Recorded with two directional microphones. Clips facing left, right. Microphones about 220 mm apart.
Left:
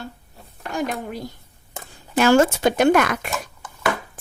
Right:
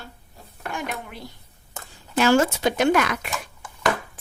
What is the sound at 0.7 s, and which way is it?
Speech, 40° left (ahead or behind).